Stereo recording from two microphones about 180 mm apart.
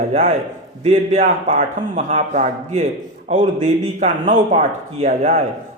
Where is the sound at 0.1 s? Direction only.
40° right (ahead or behind).